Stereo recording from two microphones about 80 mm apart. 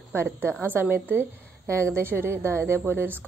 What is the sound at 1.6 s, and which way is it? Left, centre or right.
A woman's voice, right.